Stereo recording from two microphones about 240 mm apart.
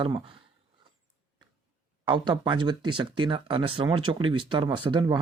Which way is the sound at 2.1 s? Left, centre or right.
Centre.